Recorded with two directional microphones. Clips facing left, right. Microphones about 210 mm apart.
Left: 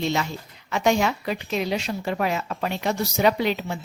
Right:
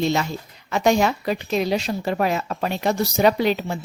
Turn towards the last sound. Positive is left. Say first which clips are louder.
# right 3 dB
turn(degrees=-40)  # may be behind; listen again after turning